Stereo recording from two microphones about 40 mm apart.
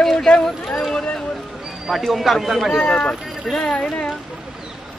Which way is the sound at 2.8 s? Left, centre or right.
Left.